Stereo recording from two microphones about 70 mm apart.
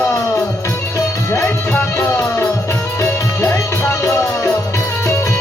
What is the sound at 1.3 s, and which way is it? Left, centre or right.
Music, left.